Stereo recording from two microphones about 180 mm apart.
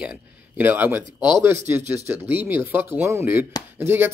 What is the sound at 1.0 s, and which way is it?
Speech, 25° left (ahead or behind).